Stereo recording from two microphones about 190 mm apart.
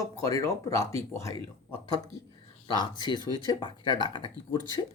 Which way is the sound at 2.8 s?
20° left (ahead or behind).